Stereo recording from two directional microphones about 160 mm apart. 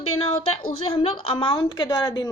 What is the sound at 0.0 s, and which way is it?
A woman's voice, 35° left (ahead or behind).